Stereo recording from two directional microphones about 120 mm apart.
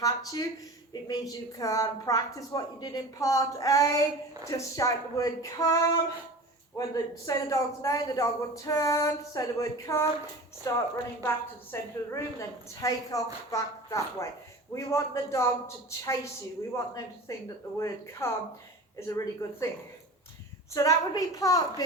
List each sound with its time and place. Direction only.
0.0 s speech: 30° left (ahead or behind)
1.5 s a woman's voice: 30° left (ahead or behind)
6.7 s a woman's voice: 30° left (ahead or behind)
20.7 s a woman's voice: 30° left (ahead or behind)